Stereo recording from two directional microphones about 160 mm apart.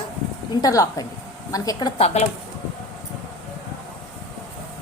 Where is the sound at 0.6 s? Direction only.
20° left (ahead or behind).